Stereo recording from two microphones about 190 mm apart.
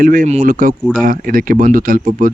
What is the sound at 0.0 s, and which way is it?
Speech, 45° right (ahead or behind).